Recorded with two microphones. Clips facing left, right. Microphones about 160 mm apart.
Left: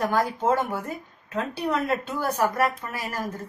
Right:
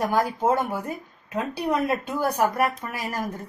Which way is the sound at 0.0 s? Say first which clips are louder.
Right 1 dB; 10° right (ahead or behind).